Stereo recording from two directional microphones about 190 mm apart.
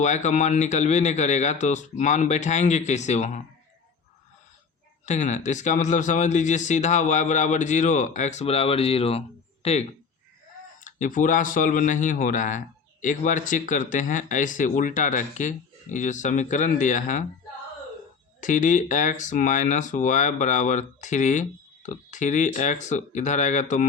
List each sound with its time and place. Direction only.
0.0 s speech: 40° left (ahead or behind)
5.0 s speech: 40° left (ahead or behind)
18.3 s speech: 40° left (ahead or behind)